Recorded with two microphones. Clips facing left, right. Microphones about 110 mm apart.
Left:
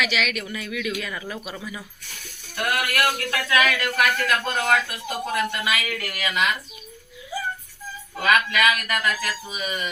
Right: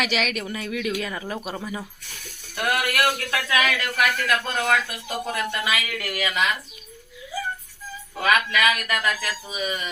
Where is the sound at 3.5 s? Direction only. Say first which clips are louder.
Left 2 dB; 35° left (ahead or behind).